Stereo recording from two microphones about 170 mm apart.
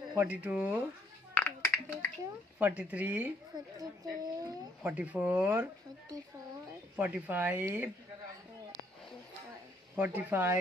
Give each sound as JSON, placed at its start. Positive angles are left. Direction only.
{"t": 0.1, "sound": "a woman's voice", "side_deg": -10}
{"t": 1.3, "sound": "a sound", "side_deg": 10}
{"t": 2.6, "sound": "a woman's voice", "side_deg": -10}
{"t": 3.7, "sound": "speech", "side_deg": -20}
{"t": 4.9, "sound": "a woman's voice", "side_deg": -10}
{"t": 7.0, "sound": "a woman's voice", "side_deg": -10}
{"t": 9.9, "sound": "a woman's voice", "side_deg": -10}